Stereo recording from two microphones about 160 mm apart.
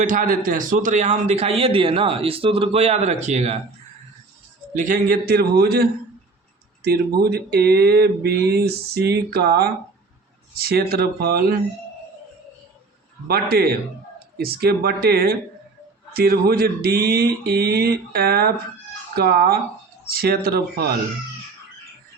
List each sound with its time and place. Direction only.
0.0 s a man's voice: 55° right (ahead or behind)
4.7 s speech: 55° right (ahead or behind); by 11.5 s 75° right (ahead or behind)
13.2 s speech: 75° right (ahead or behind)